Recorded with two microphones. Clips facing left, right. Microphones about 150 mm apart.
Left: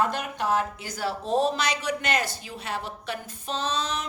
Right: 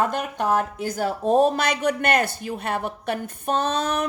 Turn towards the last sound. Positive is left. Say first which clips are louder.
# right 6 dB
turn(degrees=-55)  # may be behind; listen again after turning